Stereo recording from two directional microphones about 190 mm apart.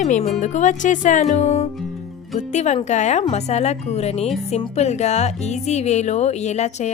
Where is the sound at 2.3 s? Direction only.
35° left (ahead or behind).